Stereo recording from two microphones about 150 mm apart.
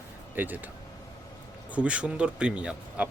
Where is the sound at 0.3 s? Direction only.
10° right (ahead or behind).